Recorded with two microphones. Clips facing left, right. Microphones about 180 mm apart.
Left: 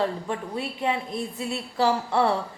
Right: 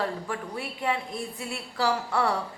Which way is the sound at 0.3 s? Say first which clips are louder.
Left 4 dB; 25° left (ahead or behind).